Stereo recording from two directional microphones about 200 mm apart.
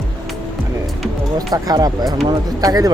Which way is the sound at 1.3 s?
20° right (ahead or behind).